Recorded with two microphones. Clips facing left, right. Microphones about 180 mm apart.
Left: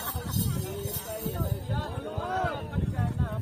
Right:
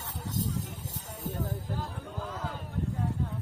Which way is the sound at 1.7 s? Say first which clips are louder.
Left 4 dB; 75° left (ahead or behind).